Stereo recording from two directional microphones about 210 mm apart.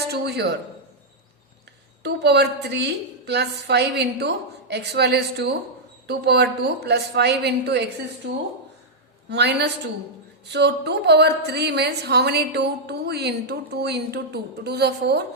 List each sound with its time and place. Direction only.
0.1 s a woman's voice: 50° right (ahead or behind)
2.0 s a woman's voice: 55° right (ahead or behind)
9.3 s a woman's voice: 55° right (ahead or behind)